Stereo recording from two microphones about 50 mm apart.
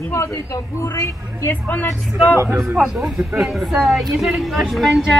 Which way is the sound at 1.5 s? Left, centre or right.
Left.